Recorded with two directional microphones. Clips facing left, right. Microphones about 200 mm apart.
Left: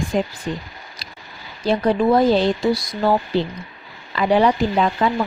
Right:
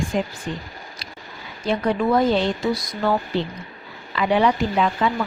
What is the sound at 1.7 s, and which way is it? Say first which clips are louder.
Speech: left 3 dB; 35° left (ahead or behind).